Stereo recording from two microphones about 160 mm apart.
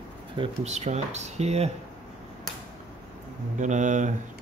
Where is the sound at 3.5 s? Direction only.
50° right (ahead or behind).